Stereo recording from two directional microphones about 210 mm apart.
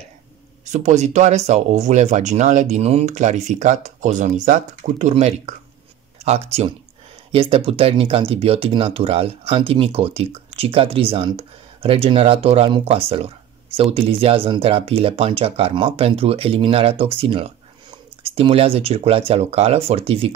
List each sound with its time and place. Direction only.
0.7 s speech: 35° right (ahead or behind)